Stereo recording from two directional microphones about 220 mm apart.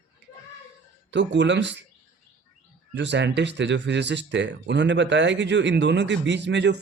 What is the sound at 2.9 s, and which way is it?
Speech, 55° right (ahead or behind).